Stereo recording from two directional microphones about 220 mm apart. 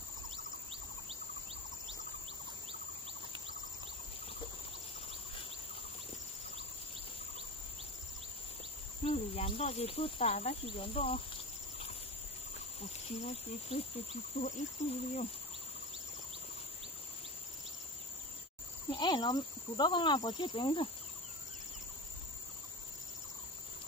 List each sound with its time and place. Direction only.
9.0 s speech: 25° left (ahead or behind)
12.8 s speech: 25° left (ahead or behind)
18.9 s speech: 20° left (ahead or behind)